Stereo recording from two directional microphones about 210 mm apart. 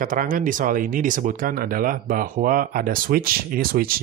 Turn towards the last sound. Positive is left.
turn(degrees=-45)  # may be behind; listen again after turning